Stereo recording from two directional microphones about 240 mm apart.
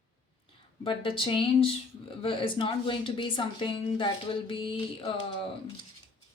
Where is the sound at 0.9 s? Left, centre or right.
Left.